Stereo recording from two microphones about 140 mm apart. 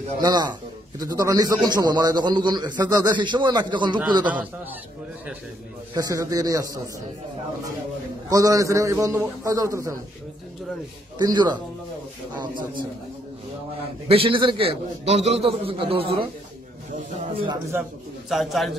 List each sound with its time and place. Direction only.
0.2 s a man's voice: 30° right (ahead or behind)
5.9 s a man's voice: 25° right (ahead or behind)
8.3 s a man's voice: 25° right (ahead or behind)
11.1 s a man's voice: 30° right (ahead or behind)
14.0 s a man's voice: 40° right (ahead or behind)
18.3 s speech: centre (ahead or behind)